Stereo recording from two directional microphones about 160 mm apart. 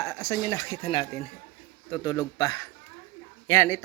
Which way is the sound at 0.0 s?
20° left (ahead or behind).